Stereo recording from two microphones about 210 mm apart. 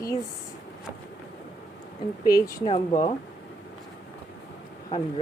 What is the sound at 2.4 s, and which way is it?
Speech, 15° left (ahead or behind).